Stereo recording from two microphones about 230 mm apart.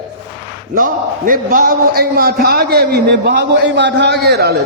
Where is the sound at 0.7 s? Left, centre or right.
Right.